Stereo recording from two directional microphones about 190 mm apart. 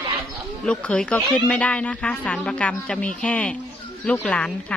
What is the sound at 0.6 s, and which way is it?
Speech, 5° left (ahead or behind).